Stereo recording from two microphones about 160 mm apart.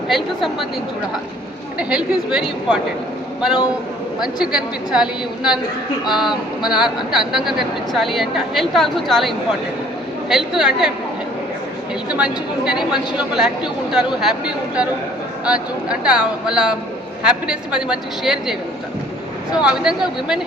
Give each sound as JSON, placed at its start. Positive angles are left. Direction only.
{"t": 1.8, "sound": "a woman's voice", "side_deg": -5}
{"t": 12.0, "sound": "a woman's voice", "side_deg": -5}
{"t": 19.5, "sound": "a woman's voice", "side_deg": -5}